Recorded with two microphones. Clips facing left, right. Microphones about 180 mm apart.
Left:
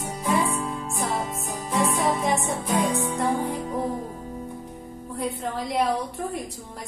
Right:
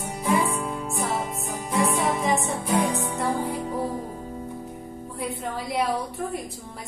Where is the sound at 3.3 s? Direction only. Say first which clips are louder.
Left 1 dB; 20° left (ahead or behind).